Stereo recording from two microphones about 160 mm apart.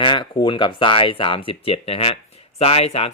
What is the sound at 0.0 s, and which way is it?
Speech, 30° left (ahead or behind).